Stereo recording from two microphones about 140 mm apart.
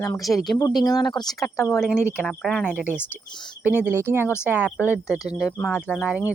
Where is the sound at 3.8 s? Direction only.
15° right (ahead or behind).